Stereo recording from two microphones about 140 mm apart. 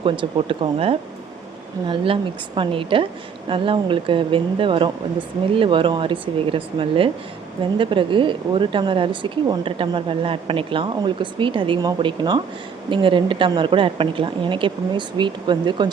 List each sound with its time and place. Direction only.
0.0 s speech: 40° right (ahead or behind)
2.6 s speech: 40° right (ahead or behind)